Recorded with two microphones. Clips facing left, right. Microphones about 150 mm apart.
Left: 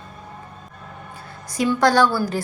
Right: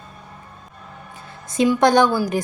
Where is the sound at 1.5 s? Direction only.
20° right (ahead or behind).